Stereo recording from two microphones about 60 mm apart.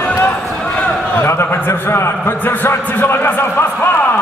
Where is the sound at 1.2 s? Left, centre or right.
Left.